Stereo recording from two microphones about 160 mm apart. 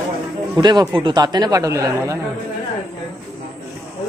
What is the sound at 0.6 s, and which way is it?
Speech, 25° right (ahead or behind).